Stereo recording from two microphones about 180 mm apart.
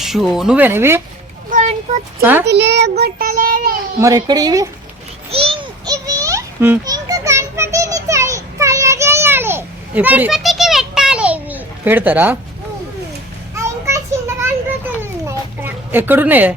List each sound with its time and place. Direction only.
0.0 s speech: centre (ahead or behind)
1.5 s a sound: 45° right (ahead or behind)
2.2 s a child's voice: 10° right (ahead or behind)
2.5 s child singing: 70° right (ahead or behind); by 3.8 s 50° right (ahead or behind)
3.9 s speech: 20° right (ahead or behind)
5.3 s children playing: 30° right (ahead or behind); by 12.4 s 10° right (ahead or behind)
13.6 s children playing: 15° right (ahead or behind)